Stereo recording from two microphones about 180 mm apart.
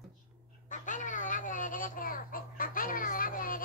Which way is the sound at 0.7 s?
45° left (ahead or behind).